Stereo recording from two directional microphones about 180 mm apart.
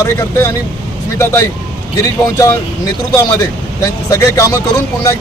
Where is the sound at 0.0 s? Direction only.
15° left (ahead or behind).